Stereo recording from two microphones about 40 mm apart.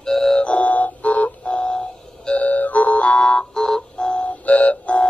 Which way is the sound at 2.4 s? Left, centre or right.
Left.